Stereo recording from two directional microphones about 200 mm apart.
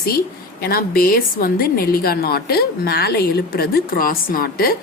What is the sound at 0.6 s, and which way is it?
A woman's voice, 50° left (ahead or behind).